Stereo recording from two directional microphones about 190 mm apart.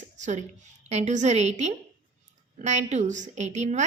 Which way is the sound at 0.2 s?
40° right (ahead or behind).